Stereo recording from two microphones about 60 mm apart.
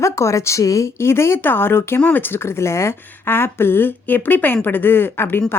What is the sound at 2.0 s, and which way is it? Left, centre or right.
Speech, left.